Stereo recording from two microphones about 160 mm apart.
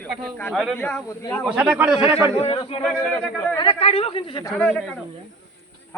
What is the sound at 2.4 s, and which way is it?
Speech, 35° left (ahead or behind).